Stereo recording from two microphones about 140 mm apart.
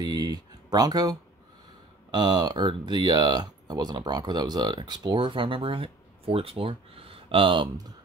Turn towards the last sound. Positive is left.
turn(degrees=-35)  # may be behind; listen again after turning